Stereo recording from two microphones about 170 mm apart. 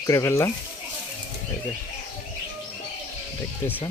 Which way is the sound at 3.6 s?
10° left (ahead or behind).